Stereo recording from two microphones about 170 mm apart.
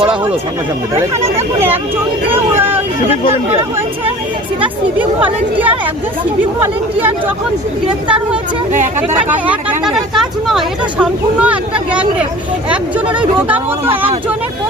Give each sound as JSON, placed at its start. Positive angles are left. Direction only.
{"t": 1.5, "sound": "speech", "side_deg": -10}
{"t": 5.2, "sound": "speech", "side_deg": -10}
{"t": 8.0, "sound": "speech", "side_deg": -5}